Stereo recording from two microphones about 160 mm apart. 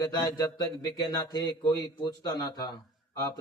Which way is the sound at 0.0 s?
20° left (ahead or behind).